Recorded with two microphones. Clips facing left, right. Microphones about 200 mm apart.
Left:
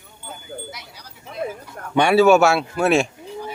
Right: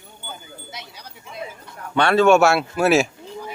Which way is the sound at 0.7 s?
25° right (ahead or behind).